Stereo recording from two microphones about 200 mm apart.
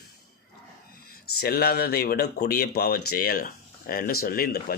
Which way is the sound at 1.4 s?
50° left (ahead or behind).